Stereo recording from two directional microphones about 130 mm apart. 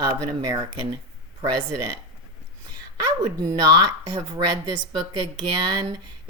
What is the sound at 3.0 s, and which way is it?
Speech, 30° right (ahead or behind).